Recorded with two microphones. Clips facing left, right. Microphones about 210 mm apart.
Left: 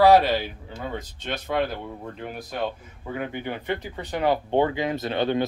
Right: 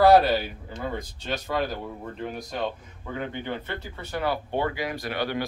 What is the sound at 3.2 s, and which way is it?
Speech, 15° left (ahead or behind).